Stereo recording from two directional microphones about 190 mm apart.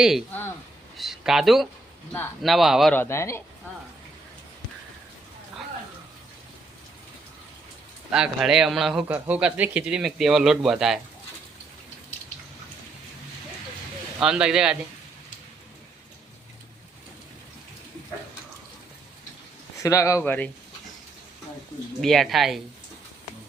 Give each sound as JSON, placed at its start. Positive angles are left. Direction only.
{"t": 0.9, "sound": "speech", "side_deg": 0}
{"t": 2.9, "sound": "speech", "side_deg": 10}
{"t": 8.1, "sound": "speech", "side_deg": -5}
{"t": 14.2, "sound": "speech", "side_deg": -5}
{"t": 19.8, "sound": "speech", "side_deg": 15}
{"t": 22.0, "sound": "speech", "side_deg": 0}